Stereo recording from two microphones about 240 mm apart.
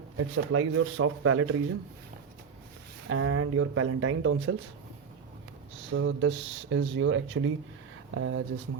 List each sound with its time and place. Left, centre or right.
0.2 s speech: right
3.1 s speech: right
5.9 s speech: right